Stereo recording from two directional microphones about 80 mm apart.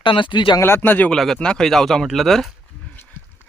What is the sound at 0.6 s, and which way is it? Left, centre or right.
Speech, left.